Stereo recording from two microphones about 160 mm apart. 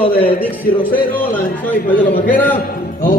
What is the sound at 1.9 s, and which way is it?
Speech, 60° left (ahead or behind).